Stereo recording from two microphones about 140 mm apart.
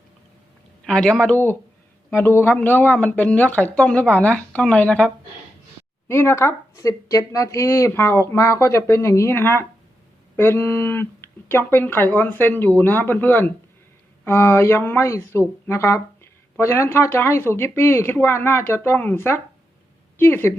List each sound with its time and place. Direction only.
0.9 s speech: 5° left (ahead or behind)
6.1 s speech: 20° left (ahead or behind)